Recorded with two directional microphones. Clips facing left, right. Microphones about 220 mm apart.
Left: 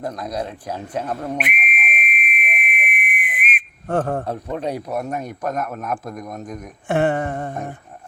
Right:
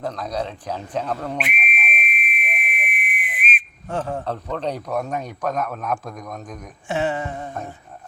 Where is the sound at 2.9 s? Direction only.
50° left (ahead or behind).